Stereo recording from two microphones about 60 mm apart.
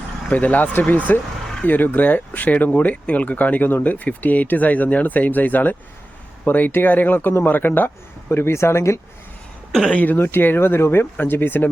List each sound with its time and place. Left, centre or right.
0.3 s speech: left
9.9 s speech: left